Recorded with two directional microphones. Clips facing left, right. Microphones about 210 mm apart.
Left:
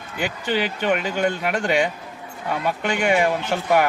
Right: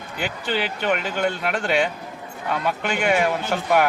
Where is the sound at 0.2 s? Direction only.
10° left (ahead or behind).